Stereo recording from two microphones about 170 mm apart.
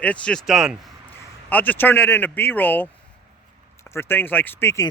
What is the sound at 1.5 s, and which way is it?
Speech, 10° left (ahead or behind).